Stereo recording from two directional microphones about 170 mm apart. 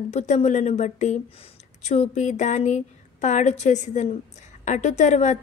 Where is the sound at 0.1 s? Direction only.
45° left (ahead or behind).